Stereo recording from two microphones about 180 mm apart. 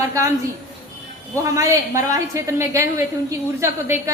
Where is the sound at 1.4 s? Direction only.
15° right (ahead or behind).